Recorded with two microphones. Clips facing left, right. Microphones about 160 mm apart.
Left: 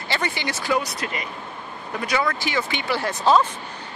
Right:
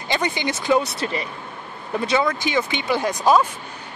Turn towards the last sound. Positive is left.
turn(degrees=-15)  # may be behind; listen again after turning